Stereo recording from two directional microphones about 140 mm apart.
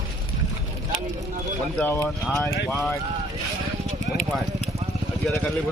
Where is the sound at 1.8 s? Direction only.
15° left (ahead or behind).